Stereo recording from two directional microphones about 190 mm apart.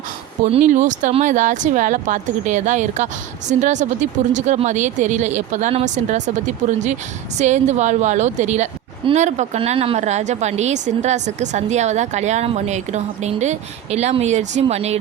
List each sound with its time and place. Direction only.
0.7 s a woman's voice: 40° right (ahead or behind)